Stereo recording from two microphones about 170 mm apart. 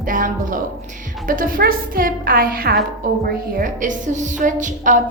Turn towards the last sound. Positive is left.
turn(degrees=-50)  # may be behind; listen again after turning